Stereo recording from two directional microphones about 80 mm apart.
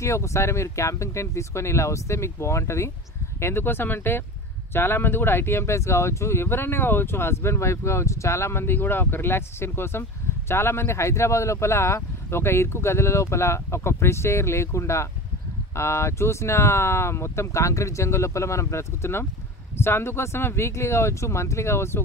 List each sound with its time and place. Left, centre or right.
0.0 s speech: left